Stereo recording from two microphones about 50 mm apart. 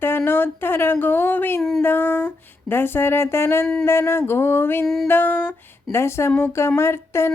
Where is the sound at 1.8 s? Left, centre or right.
Left.